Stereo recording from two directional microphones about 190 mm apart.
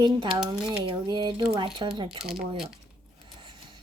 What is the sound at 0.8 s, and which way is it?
Speech, 25° right (ahead or behind).